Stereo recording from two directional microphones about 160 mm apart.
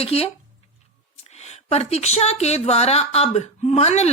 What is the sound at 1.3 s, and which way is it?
Speech, 40° left (ahead or behind).